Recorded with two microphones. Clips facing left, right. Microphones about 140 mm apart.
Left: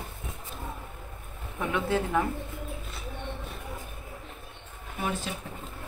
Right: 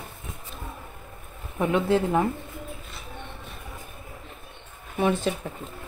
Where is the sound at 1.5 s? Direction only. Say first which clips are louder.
Right 6 dB; 25° right (ahead or behind).